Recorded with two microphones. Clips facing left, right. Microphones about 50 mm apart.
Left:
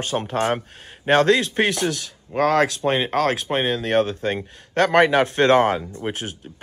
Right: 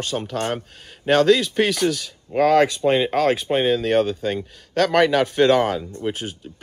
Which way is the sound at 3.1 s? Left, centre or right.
Left.